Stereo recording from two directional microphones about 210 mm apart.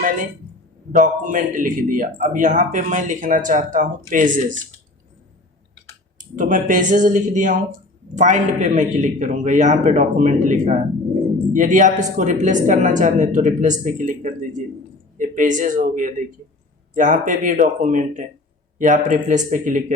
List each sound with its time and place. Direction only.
0.9 s speech: 40° right (ahead or behind)
6.1 s speech: 35° right (ahead or behind)